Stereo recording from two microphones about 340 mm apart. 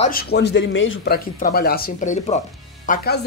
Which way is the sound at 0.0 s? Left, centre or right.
Left.